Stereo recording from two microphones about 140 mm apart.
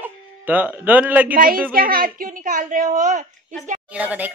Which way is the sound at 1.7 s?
90° right.